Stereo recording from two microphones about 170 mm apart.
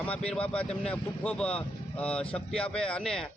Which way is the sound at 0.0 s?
5° left (ahead or behind).